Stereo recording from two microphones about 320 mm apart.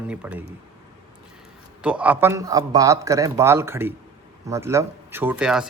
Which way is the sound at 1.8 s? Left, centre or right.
Centre.